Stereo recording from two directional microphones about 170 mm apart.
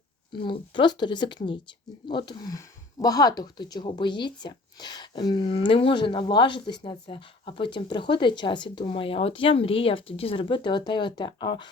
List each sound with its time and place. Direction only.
0.3 s speech: 30° left (ahead or behind)